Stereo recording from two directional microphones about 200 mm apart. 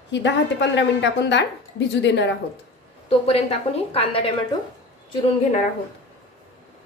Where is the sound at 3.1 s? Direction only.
30° left (ahead or behind).